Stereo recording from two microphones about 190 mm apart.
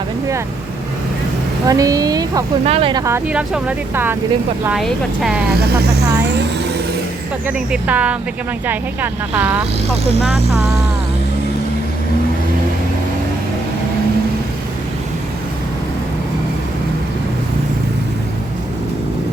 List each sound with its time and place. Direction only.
1.6 s speech: 20° right (ahead or behind)
2.6 s speech: 30° right (ahead or behind)
3.0 s speech: 10° right (ahead or behind)
7.4 s speech: 5° right (ahead or behind)